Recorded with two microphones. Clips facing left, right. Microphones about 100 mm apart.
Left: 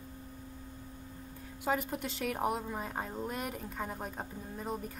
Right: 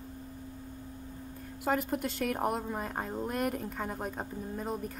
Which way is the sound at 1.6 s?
Centre (ahead or behind).